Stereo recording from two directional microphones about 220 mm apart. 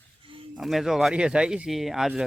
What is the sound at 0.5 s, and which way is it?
Speech, centre (ahead or behind).